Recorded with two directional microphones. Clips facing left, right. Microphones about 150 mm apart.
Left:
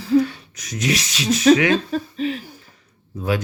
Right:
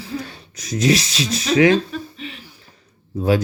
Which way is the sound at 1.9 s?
40° left (ahead or behind).